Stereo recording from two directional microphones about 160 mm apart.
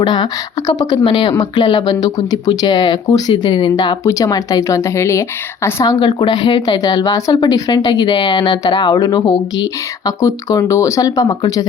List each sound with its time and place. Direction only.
0.0 s speech: 25° left (ahead or behind)